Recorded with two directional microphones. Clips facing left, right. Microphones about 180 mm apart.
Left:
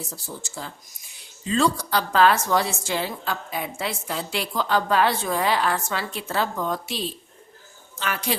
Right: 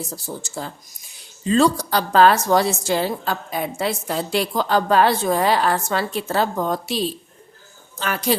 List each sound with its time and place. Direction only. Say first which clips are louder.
0.1 s a woman's voice: right 6 dB; 40° right (ahead or behind)